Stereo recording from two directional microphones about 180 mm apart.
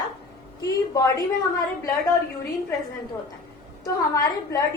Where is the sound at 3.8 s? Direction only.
20° left (ahead or behind).